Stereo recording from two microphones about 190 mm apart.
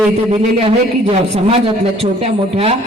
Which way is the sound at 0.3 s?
30° right (ahead or behind).